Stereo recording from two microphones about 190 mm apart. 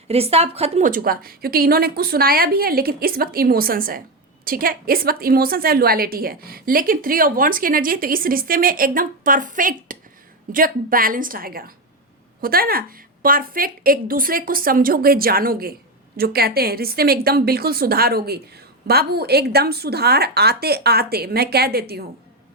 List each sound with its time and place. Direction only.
0.1 s a woman's voice: 35° right (ahead or behind)
0.9 s a woman's voice: 50° right (ahead or behind)